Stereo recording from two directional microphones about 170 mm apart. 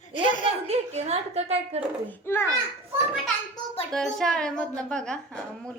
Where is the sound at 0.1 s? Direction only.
50° left (ahead or behind).